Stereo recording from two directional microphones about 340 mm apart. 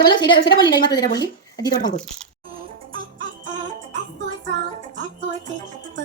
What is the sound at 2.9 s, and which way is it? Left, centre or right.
Music, right.